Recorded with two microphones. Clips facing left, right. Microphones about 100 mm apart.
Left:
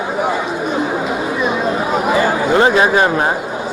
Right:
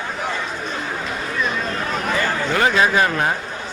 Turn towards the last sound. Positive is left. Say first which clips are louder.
# left 5 dB
turn(degrees=25)  # may be behind; listen again after turning